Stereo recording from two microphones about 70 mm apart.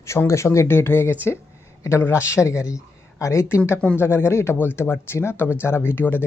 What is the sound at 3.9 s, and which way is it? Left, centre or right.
Speech, left.